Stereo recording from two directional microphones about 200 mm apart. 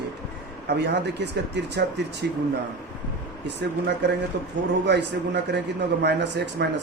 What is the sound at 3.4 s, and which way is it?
Speech, 60° right (ahead or behind).